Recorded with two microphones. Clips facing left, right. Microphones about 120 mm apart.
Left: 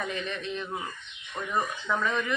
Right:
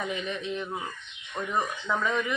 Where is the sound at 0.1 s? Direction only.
15° right (ahead or behind).